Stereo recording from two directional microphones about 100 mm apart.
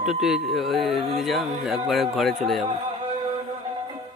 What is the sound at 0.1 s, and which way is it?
Music, 5° right (ahead or behind).